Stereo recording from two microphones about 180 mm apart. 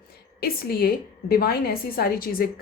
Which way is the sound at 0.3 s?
55° left (ahead or behind).